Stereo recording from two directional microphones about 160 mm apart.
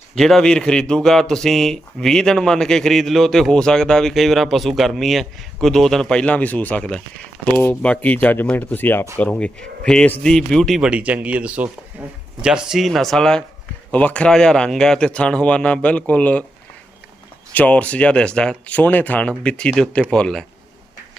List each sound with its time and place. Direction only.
0.2 s speech: 5° left (ahead or behind)
17.5 s speech: 10° left (ahead or behind)